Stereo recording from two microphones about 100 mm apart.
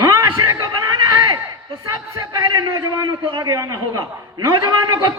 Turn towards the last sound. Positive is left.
turn(degrees=-45)  # may be behind; listen again after turning